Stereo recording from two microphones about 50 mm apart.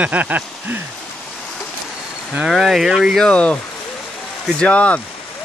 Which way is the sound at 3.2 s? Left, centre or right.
Left.